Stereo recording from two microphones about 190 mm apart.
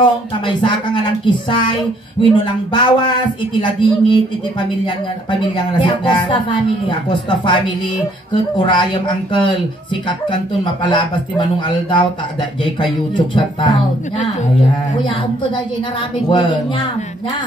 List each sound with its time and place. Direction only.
0.6 s speech: 25° left (ahead or behind)
5.4 s speech: 25° left (ahead or behind)
10.6 s speech: 25° left (ahead or behind)
15.0 s speech: 25° left (ahead or behind)